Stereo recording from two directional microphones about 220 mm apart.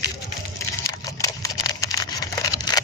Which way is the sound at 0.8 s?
15° left (ahead or behind).